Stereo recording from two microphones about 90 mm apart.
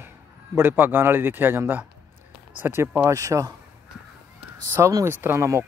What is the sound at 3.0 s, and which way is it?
Speech, 35° right (ahead or behind).